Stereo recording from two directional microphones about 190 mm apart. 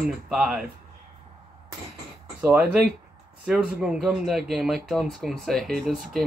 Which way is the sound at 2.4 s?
10° right (ahead or behind).